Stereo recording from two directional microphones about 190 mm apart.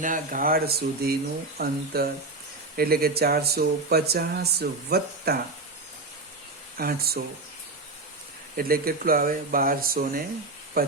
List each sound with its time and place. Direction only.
0.0 s speech: 45° right (ahead or behind)
6.7 s speech: 50° right (ahead or behind)
8.5 s speech: 50° right (ahead or behind)